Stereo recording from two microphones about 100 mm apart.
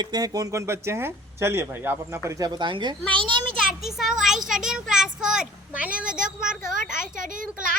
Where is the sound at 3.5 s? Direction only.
5° right (ahead or behind).